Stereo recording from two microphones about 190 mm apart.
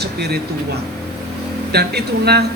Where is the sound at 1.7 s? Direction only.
60° right (ahead or behind).